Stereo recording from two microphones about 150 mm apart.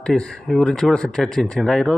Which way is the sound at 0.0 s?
5° left (ahead or behind).